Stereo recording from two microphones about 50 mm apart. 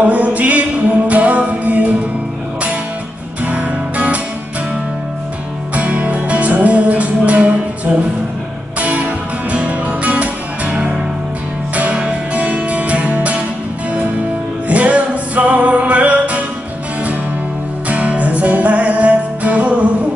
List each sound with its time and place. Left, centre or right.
0.0 s music: right
3.4 s music: right
5.8 s music: right
14.7 s music: right
17.8 s music: right